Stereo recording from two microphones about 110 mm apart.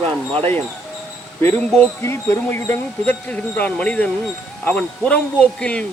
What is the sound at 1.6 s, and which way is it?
Speech, 10° left (ahead or behind).